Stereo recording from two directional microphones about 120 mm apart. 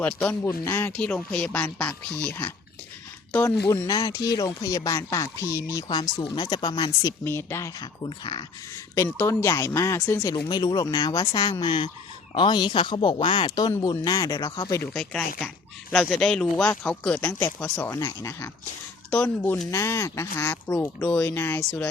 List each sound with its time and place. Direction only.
0.0 s speech: 15° left (ahead or behind)
0.9 s speech: 10° left (ahead or behind)
3.3 s speech: 25° left (ahead or behind)
5.9 s speech: 40° left (ahead or behind)
7.3 s speech: 20° left (ahead or behind)
7.8 s speech: 35° left (ahead or behind)
9.1 s speech: 20° left (ahead or behind)
10.3 s speech: 40° left (ahead or behind)
14.9 s speech: 5° left (ahead or behind)
19.7 s speech: 25° left (ahead or behind)